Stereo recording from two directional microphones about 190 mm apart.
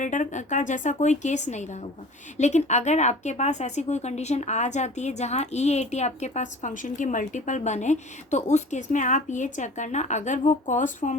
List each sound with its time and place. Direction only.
0.0 s speech: 40° left (ahead or behind)